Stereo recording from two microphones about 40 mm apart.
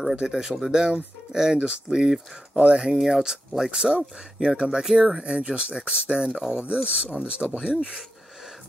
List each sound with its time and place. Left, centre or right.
0.3 s speech: centre
2.5 s speech: right
2.8 s speech: centre